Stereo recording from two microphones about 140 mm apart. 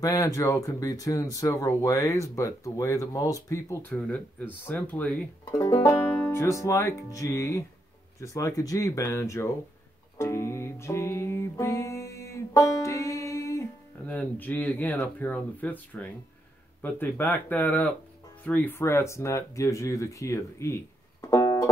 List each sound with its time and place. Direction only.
0.0 s speech: 25° left (ahead or behind)
3.9 s speech: 10° left (ahead or behind)
5.4 s speech: 25° left (ahead or behind)
10.1 s music: 20° left (ahead or behind)
14.0 s speech: 10° left (ahead or behind)